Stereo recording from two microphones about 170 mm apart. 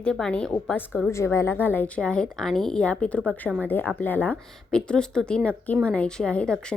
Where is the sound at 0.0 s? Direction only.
5° left (ahead or behind).